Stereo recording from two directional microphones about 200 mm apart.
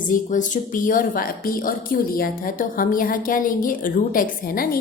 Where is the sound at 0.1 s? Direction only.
40° left (ahead or behind).